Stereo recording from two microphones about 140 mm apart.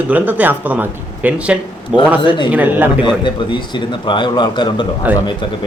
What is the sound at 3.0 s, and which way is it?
A man's voice, 35° left (ahead or behind).